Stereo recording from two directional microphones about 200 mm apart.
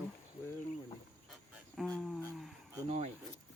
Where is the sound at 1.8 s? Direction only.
5° left (ahead or behind).